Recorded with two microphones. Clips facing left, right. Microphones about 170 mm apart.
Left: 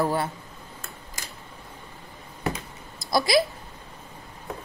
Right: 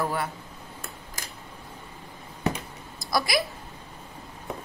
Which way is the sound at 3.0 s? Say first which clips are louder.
Left 3 dB; 25° left (ahead or behind).